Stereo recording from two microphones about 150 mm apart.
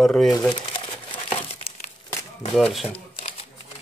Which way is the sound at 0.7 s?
35° left (ahead or behind).